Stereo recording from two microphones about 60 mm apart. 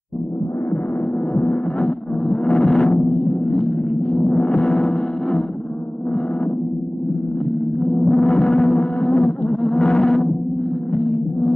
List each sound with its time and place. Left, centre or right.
1.3 s music: left
4.1 s gong: centre
4.7 s music: centre
7.9 s music: centre
9.6 s wild animals: centre